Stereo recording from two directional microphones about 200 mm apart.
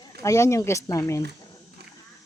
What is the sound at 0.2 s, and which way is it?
Speech, 15° left (ahead or behind).